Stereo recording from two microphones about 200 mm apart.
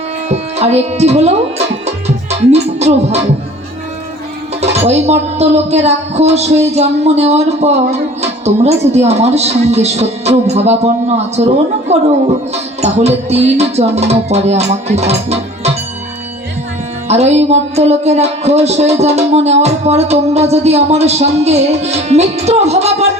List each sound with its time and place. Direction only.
0.3 s speech: 35° right (ahead or behind)
2.5 s music: 35° right (ahead or behind)
4.6 s music: 35° right (ahead or behind)
17.1 s music: 35° right (ahead or behind)